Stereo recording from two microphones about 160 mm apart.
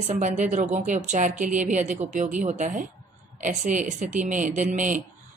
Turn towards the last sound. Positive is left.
turn(degrees=-50)  # may be behind; listen again after turning